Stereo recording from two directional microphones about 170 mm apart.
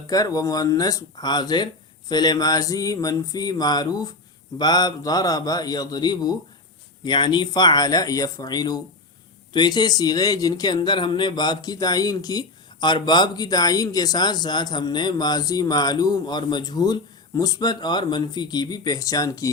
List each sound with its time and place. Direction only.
0.1 s speech: 20° left (ahead or behind)